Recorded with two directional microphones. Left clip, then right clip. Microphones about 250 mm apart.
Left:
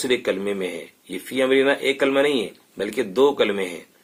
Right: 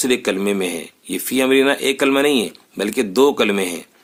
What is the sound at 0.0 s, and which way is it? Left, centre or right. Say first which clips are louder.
Speech: right 3 dB; right.